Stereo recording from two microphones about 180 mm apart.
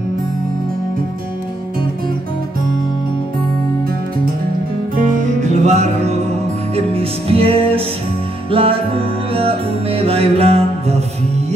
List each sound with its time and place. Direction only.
4.9 s music: 45° right (ahead or behind)